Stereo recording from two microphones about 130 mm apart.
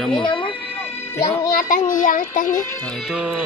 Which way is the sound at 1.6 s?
90° left.